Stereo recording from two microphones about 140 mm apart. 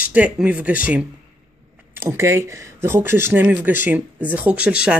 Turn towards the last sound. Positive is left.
turn(degrees=-5)  # may be behind; listen again after turning